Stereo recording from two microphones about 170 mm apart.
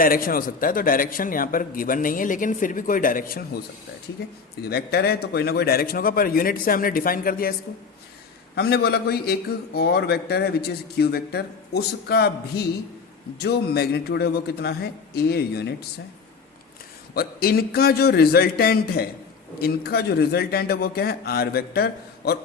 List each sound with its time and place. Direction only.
0.0 s a man's voice: 60° left (ahead or behind)
4.6 s a man's voice: 70° left (ahead or behind)
8.5 s a man's voice: 70° left (ahead or behind)
17.2 s a man's voice: 65° left (ahead or behind)